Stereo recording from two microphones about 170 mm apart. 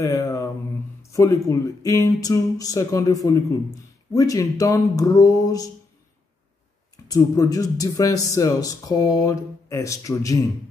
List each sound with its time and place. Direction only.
0.0 s a sound: 20° left (ahead or behind)
1.1 s speech: 20° left (ahead or behind)
7.1 s speech: 20° left (ahead or behind)